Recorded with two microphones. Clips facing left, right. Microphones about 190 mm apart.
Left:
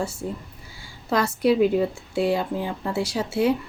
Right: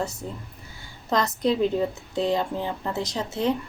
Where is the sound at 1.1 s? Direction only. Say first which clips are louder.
Left 3 dB; 10° left (ahead or behind).